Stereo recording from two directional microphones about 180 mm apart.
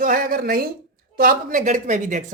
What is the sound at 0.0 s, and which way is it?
Speech, 50° right (ahead or behind).